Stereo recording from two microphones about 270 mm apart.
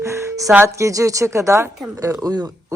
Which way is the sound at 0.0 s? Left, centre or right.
Centre.